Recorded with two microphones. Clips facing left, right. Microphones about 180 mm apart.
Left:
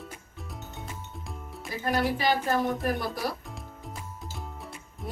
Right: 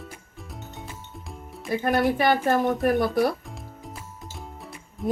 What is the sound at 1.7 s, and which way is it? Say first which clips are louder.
A woman's voice: right 5 dB; 60° right (ahead or behind).